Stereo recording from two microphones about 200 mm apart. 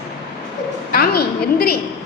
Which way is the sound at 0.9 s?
50° left (ahead or behind).